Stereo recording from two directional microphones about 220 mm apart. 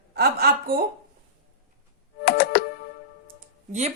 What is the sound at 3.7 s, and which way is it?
Speech, 30° right (ahead or behind).